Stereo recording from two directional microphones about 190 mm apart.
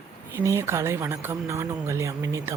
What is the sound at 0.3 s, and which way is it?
Speech, 15° right (ahead or behind).